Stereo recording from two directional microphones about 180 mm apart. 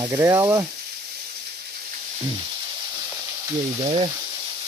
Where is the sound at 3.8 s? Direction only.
35° right (ahead or behind).